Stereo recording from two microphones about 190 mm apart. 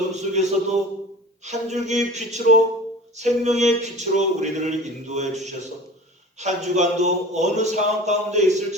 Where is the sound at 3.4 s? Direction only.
35° right (ahead or behind).